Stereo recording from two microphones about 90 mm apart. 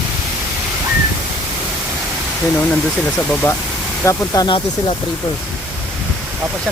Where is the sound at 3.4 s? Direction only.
25° left (ahead or behind).